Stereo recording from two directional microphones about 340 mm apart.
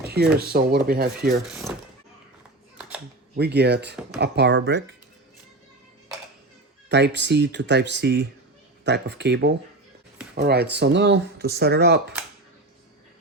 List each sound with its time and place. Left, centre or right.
0.3 s speech: right
3.3 s speech: right
6.8 s speech: right